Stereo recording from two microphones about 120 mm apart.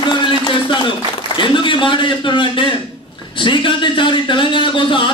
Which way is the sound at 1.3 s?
40° left (ahead or behind).